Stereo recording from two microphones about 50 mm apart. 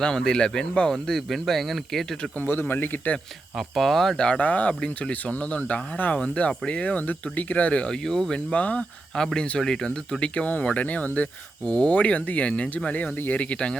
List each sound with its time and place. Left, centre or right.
0.0 s speech: centre
0.9 s speech: centre
2.4 s speech: left
3.6 s speech: centre
4.2 s speech: left
8.0 s speech: centre; by 8.9 s left
9.1 s speech: centre; by 11.3 s left
11.6 s speech: centre
12.9 s speech: left
13.4 s speech: left